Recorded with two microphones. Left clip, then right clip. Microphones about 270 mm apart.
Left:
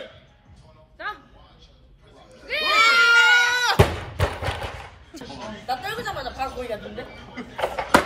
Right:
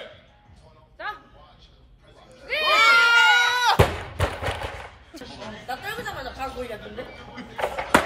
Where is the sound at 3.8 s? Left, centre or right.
Centre.